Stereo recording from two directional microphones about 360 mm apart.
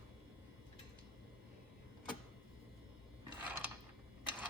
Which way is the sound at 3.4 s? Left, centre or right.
Centre.